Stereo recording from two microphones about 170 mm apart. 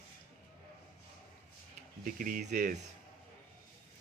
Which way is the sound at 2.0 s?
55° right (ahead or behind).